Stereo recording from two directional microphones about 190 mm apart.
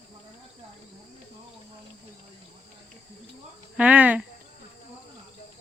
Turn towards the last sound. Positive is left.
turn(degrees=-10)  # may be behind; listen again after turning